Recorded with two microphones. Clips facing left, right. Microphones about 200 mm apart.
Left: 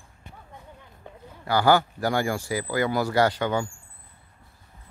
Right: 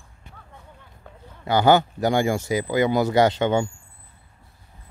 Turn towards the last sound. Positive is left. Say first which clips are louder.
# right 4 dB
turn(degrees=-25)  # may be behind; listen again after turning